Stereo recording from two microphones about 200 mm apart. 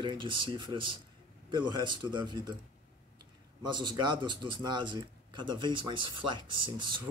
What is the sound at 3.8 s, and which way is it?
Speech, 20° right (ahead or behind).